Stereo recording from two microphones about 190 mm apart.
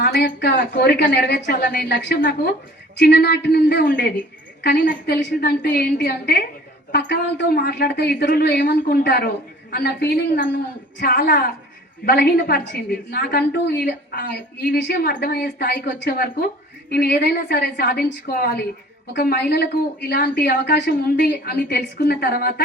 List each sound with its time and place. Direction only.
0.0 s a woman's voice: 55° left (ahead or behind)